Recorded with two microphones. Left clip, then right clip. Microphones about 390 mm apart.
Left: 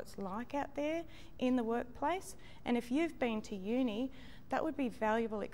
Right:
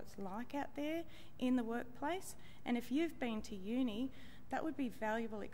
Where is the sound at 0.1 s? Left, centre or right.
Left.